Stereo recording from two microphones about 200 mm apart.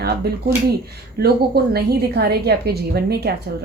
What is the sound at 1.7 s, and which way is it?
A woman's voice, 55° right (ahead or behind).